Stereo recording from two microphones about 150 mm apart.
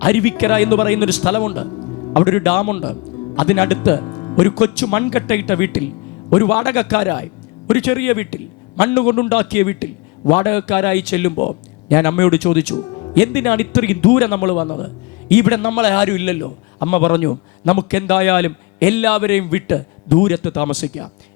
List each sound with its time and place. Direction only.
0.0 s a man's voice: 20° left (ahead or behind)
16.2 s a man's voice: 30° left (ahead or behind)